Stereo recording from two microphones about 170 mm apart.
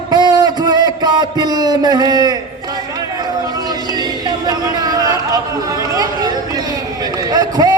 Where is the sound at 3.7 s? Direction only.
25° right (ahead or behind).